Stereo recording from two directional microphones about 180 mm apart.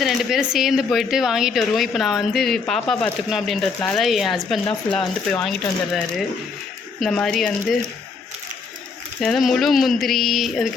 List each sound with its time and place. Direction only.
0.0 s a woman's voice: centre (ahead or behind)
9.2 s a woman's voice: centre (ahead or behind)